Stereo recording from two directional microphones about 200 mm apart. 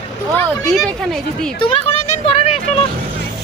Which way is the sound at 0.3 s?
5° left (ahead or behind).